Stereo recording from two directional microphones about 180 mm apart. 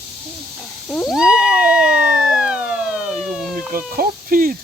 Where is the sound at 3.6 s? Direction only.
50° right (ahead or behind).